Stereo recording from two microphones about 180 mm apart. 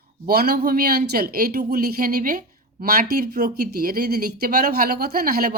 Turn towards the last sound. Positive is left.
turn(degrees=-55)  # may be behind; listen again after turning